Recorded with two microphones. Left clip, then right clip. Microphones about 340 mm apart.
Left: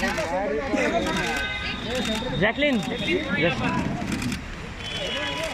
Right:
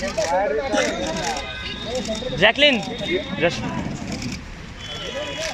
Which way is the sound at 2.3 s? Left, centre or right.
Right.